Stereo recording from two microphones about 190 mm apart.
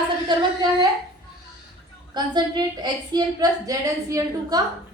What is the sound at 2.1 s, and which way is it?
A woman's voice, 20° right (ahead or behind).